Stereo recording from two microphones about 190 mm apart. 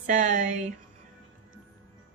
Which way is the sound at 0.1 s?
40° right (ahead or behind).